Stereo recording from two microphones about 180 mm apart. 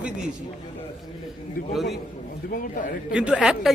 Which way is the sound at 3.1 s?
5° right (ahead or behind).